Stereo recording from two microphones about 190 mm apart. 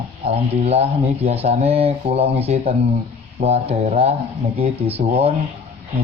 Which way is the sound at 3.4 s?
35° right (ahead or behind).